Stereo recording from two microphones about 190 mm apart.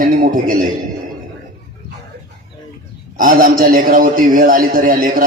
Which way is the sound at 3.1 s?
45° right (ahead or behind).